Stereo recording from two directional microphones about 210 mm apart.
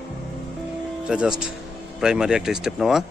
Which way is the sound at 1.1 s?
5° right (ahead or behind).